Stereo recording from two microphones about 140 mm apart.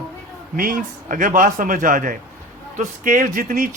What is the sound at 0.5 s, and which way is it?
A man's voice, 85° right.